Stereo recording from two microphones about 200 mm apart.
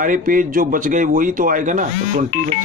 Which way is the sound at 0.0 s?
40° right (ahead or behind).